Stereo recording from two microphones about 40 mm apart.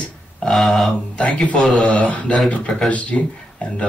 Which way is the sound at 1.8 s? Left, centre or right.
Left.